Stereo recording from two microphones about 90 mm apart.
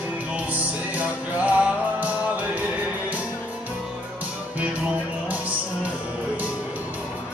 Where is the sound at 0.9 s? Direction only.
15° right (ahead or behind).